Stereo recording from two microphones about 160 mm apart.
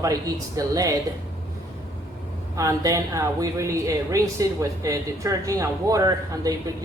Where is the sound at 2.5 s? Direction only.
20° right (ahead or behind).